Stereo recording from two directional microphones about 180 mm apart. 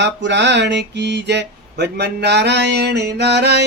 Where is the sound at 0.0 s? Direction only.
80° right.